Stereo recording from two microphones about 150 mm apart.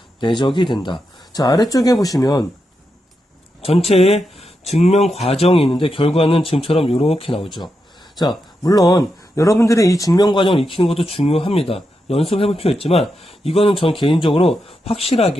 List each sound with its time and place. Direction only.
0.2 s speech: 30° left (ahead or behind)
3.6 s speech: 40° left (ahead or behind)